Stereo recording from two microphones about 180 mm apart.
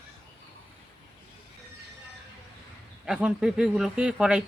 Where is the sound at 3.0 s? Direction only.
5° right (ahead or behind).